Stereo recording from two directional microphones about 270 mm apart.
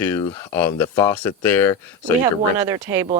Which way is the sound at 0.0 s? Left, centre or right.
Centre.